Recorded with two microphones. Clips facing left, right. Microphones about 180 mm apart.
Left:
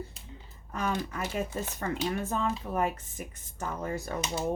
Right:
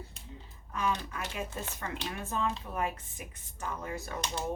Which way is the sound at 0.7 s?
45° left (ahead or behind).